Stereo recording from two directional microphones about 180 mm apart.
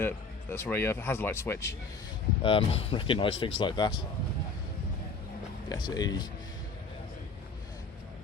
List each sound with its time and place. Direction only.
0.5 s speech: 15° left (ahead or behind)
2.4 s speech: 30° left (ahead or behind)
5.6 s speech: 20° left (ahead or behind)